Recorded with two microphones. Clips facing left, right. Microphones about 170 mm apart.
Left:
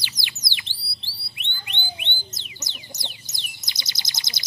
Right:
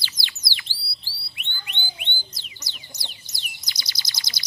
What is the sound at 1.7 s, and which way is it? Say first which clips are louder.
Chicken: left 2 dB; 20° left (ahead or behind).